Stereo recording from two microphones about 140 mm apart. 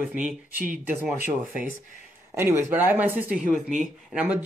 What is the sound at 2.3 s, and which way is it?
Speech, 15° right (ahead or behind).